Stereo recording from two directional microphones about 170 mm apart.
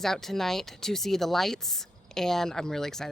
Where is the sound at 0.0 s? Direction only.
Centre (ahead or behind).